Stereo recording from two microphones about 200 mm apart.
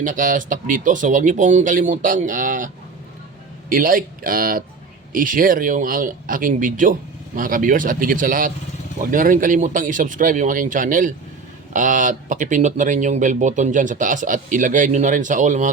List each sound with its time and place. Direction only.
0.0 s speech: 40° right (ahead or behind)
3.7 s speech: 45° right (ahead or behind)